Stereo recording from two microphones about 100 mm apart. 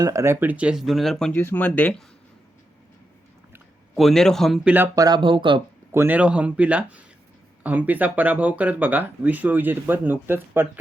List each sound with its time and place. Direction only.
0.0 s speech: 30° right (ahead or behind)
0.3 s speech: 15° right (ahead or behind); by 1.3 s 5° left (ahead or behind)
1.3 s speech: 20° left (ahead or behind)
3.9 s speech: centre (ahead or behind)
4.6 s speech: 20° right (ahead or behind)
4.9 s speech: 40° right (ahead or behind)
5.2 s speech: 55° right (ahead or behind)
5.9 s a man's voice: 25° right (ahead or behind)
6.1 s speech: 10° right (ahead or behind)